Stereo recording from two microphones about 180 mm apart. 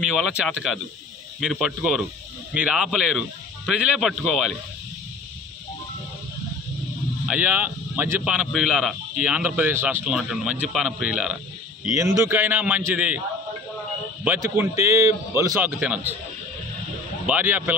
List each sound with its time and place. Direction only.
0.0 s speech: 5° right (ahead or behind)
7.2 s a man's voice: 10° right (ahead or behind)
11.8 s a man's voice: 15° right (ahead or behind)
14.2 s a man's voice: 10° right (ahead or behind)
17.3 s a man's voice: 10° right (ahead or behind)